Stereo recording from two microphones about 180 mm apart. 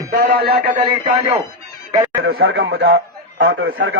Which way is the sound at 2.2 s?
65° right (ahead or behind).